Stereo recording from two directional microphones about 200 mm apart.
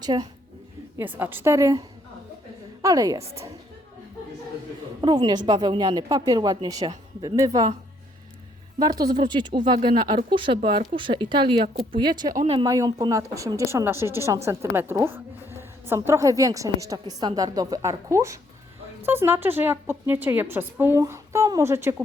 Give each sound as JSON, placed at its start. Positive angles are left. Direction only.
{"t": 0.0, "sound": "a woman's voice", "side_deg": -20}
{"t": 0.9, "sound": "a woman's voice", "side_deg": -10}
{"t": 2.8, "sound": "a woman's voice", "side_deg": -15}
{"t": 4.9, "sound": "a woman's voice", "side_deg": -20}
{"t": 8.8, "sound": "a woman's voice", "side_deg": -20}